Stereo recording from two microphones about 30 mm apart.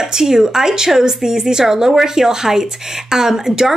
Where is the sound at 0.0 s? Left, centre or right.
Centre.